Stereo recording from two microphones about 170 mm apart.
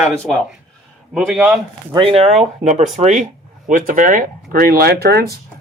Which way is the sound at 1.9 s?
30° right (ahead or behind).